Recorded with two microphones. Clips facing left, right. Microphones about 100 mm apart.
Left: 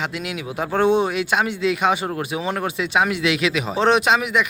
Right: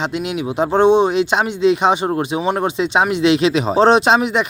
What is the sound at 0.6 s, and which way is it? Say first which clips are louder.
Speech: right 5 dB; 25° right (ahead or behind).